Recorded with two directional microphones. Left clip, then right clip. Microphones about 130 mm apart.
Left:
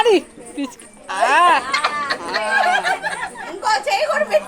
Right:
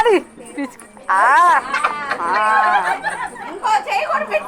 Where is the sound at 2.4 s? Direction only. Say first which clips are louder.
Right 1 dB; 30° left (ahead or behind).